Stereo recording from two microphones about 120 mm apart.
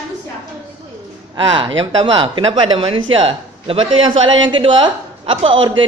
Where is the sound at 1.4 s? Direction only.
45° right (ahead or behind).